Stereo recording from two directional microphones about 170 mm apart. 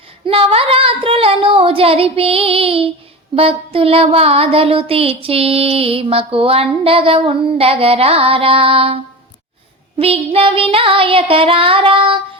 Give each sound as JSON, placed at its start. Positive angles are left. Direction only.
{"t": 0.3, "sound": "child singing", "side_deg": -35}
{"t": 10.0, "sound": "child singing", "side_deg": -35}